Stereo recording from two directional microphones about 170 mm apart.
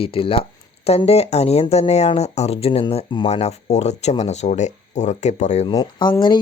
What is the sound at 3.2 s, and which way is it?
Speech, 40° left (ahead or behind).